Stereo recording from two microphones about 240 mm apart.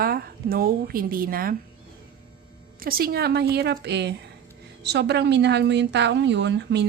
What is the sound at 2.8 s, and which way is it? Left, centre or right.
A woman's voice, right.